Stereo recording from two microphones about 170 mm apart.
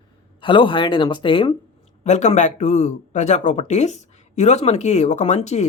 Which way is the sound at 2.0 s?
45° left (ahead or behind).